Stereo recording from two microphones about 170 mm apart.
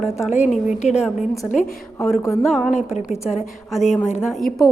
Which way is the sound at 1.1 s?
20° left (ahead or behind).